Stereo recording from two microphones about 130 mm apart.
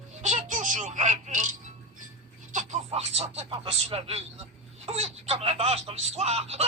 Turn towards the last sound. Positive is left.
turn(degrees=-55)  # may be behind; listen again after turning